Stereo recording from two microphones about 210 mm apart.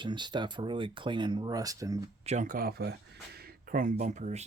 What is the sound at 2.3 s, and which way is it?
Speech, 40° right (ahead or behind).